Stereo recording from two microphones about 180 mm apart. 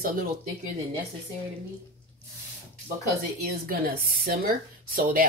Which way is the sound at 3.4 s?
55° right (ahead or behind).